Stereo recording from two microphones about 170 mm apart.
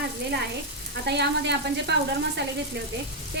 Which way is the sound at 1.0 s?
80° right.